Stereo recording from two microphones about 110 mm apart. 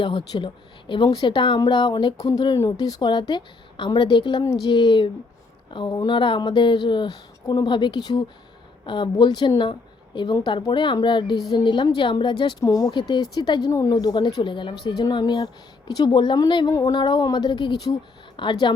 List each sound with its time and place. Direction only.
0.0 s speech: 50° left (ahead or behind)
12.5 s speech: 35° left (ahead or behind)